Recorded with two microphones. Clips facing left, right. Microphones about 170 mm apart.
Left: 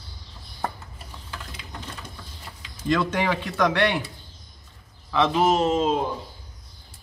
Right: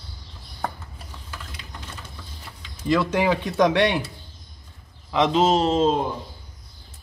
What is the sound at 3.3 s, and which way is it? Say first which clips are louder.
Speech: right 4 dB; 20° right (ahead or behind).